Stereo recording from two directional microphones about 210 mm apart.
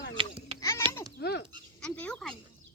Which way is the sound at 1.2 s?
50° left (ahead or behind).